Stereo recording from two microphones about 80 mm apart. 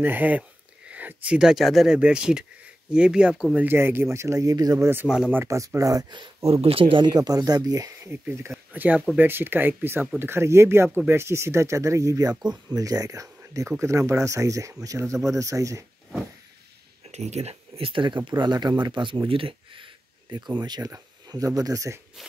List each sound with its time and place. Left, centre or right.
0.0 s speech: right
3.5 s speech: right
5.0 s speech: centre
5.4 s speech: right
6.0 s speech: right
6.8 s speech: right
7.2 s speech: right
8.0 s speech: right
17.9 s speech: right
18.4 s speech: right
21.3 s speech: right